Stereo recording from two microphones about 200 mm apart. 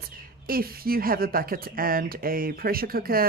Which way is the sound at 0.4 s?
45° right (ahead or behind).